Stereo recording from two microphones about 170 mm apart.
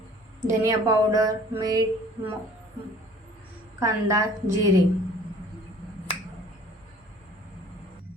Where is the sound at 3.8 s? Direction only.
20° right (ahead or behind).